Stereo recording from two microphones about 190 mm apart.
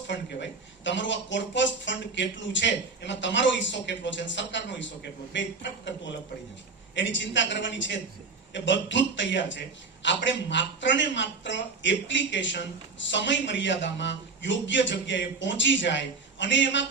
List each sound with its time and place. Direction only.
0.1 s a man's voice: 70° left (ahead or behind)